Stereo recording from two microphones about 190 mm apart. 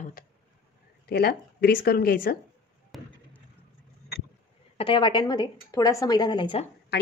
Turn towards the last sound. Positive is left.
turn(degrees=25)  # may be behind; listen again after turning